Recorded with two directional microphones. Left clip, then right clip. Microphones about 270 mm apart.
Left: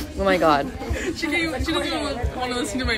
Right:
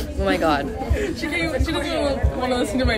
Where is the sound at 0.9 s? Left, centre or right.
Centre.